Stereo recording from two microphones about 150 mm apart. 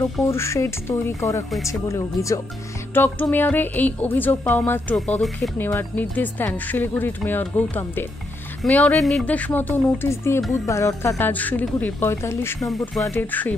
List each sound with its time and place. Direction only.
0.3 s speech: 20° left (ahead or behind); by 5.5 s 5° left (ahead or behind)
5.6 s speech: 15° left (ahead or behind)
12.5 s speech: centre (ahead or behind)
13.1 s speech: 10° left (ahead or behind)